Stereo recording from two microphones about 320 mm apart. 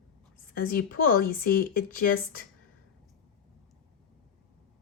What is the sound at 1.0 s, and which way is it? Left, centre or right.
Speech, left.